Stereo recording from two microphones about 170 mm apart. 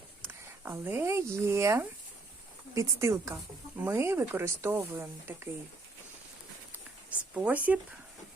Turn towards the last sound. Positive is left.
turn(degrees=-10)  # may be behind; listen again after turning